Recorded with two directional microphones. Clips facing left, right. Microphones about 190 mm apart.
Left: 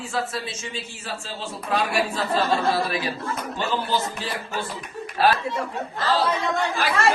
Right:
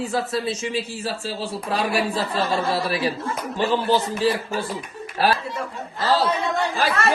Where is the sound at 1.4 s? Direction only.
35° right (ahead or behind).